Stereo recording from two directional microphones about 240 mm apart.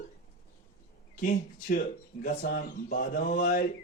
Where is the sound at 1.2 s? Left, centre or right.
Left.